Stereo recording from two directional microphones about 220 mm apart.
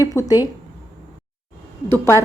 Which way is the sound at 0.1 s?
15° left (ahead or behind).